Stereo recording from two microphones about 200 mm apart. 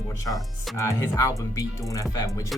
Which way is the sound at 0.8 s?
15° left (ahead or behind).